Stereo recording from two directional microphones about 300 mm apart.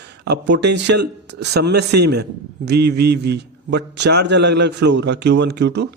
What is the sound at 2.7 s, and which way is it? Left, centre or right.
Speech, right.